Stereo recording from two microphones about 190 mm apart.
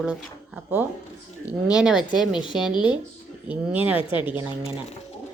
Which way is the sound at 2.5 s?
5° right (ahead or behind).